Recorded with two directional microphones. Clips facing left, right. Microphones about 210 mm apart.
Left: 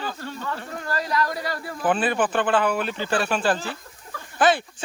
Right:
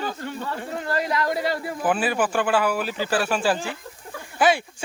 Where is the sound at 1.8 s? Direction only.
5° right (ahead or behind).